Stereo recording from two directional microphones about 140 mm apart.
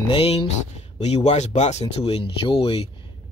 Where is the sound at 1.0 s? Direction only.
55° left (ahead or behind).